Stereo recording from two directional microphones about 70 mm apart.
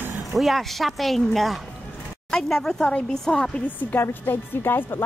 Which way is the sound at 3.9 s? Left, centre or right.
Left.